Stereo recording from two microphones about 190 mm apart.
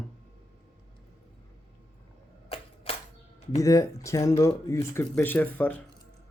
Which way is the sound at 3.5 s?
15° left (ahead or behind).